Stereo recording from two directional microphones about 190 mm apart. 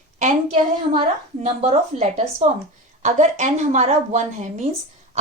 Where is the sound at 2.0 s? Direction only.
35° right (ahead or behind).